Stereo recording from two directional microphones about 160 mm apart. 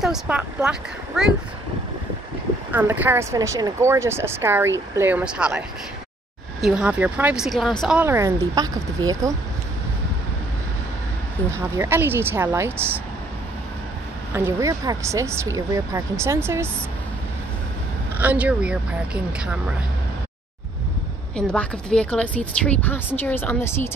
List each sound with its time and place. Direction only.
0.0 s speech: 5° right (ahead or behind)
2.7 s speech: 10° right (ahead or behind)
6.6 s speech: 5° right (ahead or behind)
8.0 s speech: 15° right (ahead or behind)
11.5 s speech: 15° right (ahead or behind)
14.3 s speech: 15° right (ahead or behind)
18.1 s speech: 10° right (ahead or behind)
21.4 s a woman's voice: 5° left (ahead or behind)